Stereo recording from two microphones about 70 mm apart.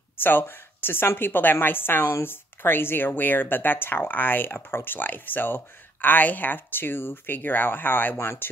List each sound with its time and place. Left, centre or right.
0.2 s a woman's voice: left